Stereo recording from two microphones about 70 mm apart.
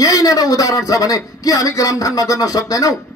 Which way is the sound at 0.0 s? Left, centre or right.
Left.